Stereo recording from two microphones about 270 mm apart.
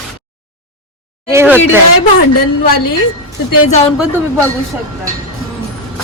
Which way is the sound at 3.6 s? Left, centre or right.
Left.